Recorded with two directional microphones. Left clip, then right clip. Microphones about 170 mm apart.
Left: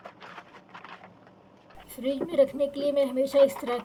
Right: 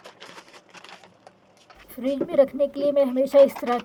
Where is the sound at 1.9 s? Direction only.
50° right (ahead or behind).